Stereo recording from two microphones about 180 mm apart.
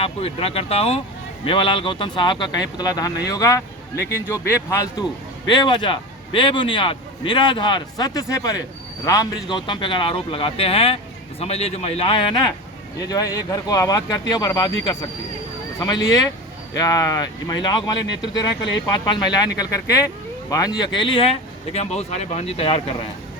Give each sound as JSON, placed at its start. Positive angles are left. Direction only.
{"t": 0.0, "sound": "a man's voice", "side_deg": 30}
{"t": 5.5, "sound": "a man's voice", "side_deg": 25}
{"t": 15.8, "sound": "a man's voice", "side_deg": 20}